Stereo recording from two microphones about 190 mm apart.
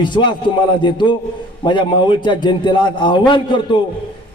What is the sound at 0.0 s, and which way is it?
A man's voice, 25° left (ahead or behind).